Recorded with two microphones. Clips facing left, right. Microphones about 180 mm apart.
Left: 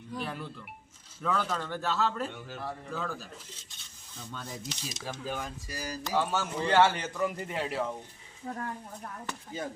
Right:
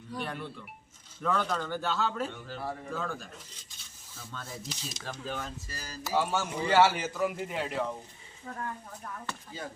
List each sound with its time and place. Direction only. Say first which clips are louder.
0.2 s a man's voice: right 1 dB; centre (ahead or behind)
4.2 s speech: left 1 dB; 15° left (ahead or behind)
4.7 s speech: left 1 dB; centre (ahead or behind)
6.0 s a man's voice: right 1 dB; 10° right (ahead or behind)
8.4 s speech: left 4 dB; 35° left (ahead or behind)
9.2 s speech: left 7 dB; 20° left (ahead or behind)